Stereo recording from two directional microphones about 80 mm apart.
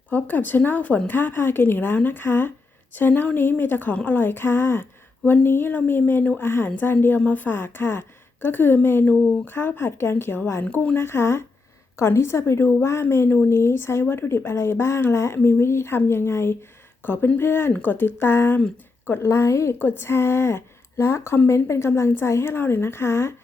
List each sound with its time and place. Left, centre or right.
0.1 s speech: left
10.6 s speech: left
11.0 s speech: left